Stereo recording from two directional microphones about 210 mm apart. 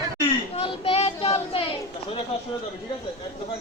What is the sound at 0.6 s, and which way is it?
Child singing, 30° left (ahead or behind).